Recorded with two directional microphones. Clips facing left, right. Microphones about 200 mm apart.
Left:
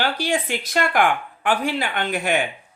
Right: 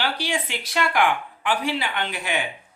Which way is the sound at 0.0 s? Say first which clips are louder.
Left 4 dB; 45° left (ahead or behind).